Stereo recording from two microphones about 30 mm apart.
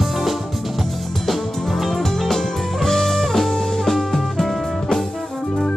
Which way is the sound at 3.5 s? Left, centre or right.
Centre.